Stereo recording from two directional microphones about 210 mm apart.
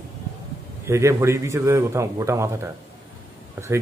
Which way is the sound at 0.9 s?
15° right (ahead or behind).